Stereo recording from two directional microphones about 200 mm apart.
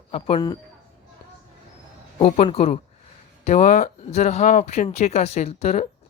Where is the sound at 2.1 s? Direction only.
30° left (ahead or behind).